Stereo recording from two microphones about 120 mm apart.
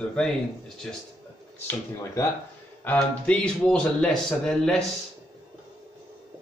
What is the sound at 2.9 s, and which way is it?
Speech, 5° left (ahead or behind).